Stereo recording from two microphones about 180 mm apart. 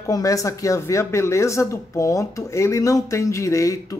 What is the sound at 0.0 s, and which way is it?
Speech, 20° left (ahead or behind).